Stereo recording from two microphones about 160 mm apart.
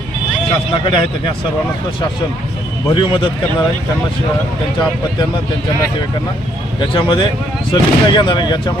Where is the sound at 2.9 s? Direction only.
30° left (ahead or behind).